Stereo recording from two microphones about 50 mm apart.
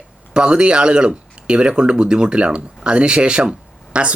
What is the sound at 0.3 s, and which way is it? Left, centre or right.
Speech, centre.